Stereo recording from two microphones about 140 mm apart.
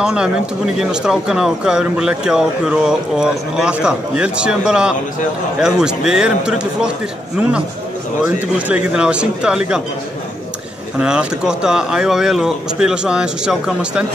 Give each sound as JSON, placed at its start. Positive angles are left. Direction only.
{"t": 0.0, "sound": "speech", "side_deg": -5}
{"t": 8.2, "sound": "speech", "side_deg": -10}
{"t": 11.0, "sound": "speech", "side_deg": -5}